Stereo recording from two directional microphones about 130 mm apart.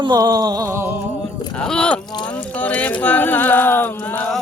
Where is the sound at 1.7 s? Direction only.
5° left (ahead or behind).